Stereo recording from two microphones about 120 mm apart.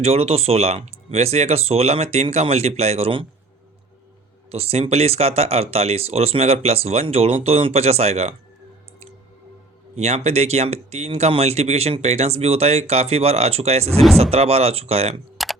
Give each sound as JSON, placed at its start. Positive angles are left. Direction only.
{"t": 0.0, "sound": "speech", "side_deg": -60}
{"t": 4.5, "sound": "speech", "side_deg": -60}
{"t": 9.9, "sound": "speech", "side_deg": -65}
{"t": 15.4, "sound": "a sound", "side_deg": 0}